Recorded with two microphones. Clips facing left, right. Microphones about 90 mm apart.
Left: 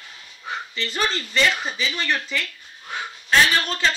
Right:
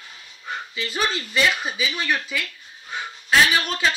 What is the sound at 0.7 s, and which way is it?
Speech, 5° right (ahead or behind).